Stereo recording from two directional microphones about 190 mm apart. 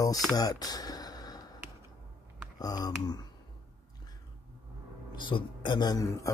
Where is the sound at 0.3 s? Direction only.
20° left (ahead or behind).